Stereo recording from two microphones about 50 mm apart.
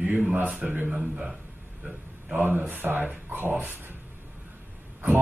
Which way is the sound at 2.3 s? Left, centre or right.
Right.